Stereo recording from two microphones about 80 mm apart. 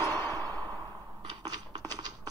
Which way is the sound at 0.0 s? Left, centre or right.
Left.